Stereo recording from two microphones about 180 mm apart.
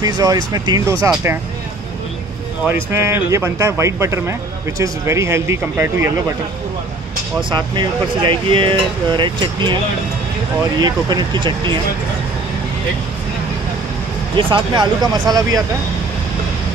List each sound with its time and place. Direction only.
0.0 s speech: 20° right (ahead or behind)
2.6 s speech: 15° right (ahead or behind)
7.4 s speech: 25° right (ahead or behind)
10.8 s speech: 25° right (ahead or behind)
14.3 s speech: 25° right (ahead or behind)